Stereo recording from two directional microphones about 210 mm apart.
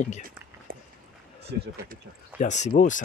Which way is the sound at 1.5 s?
55° right (ahead or behind).